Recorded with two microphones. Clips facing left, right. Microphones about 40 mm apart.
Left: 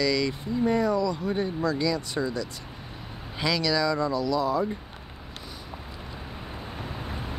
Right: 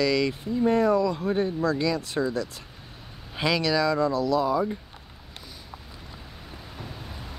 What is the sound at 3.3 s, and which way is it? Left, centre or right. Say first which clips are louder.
Speech: right 2 dB; right.